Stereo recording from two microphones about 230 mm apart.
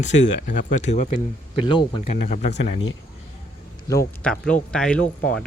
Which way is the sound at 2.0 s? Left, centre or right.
Left.